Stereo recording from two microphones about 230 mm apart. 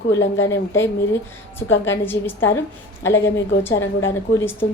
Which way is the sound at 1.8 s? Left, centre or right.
Centre.